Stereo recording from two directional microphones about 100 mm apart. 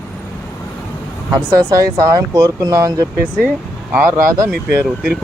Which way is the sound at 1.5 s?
35° right (ahead or behind).